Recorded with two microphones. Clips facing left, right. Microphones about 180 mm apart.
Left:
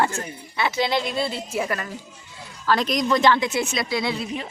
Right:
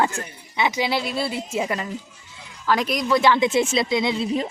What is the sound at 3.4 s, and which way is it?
Speech, 25° right (ahead or behind).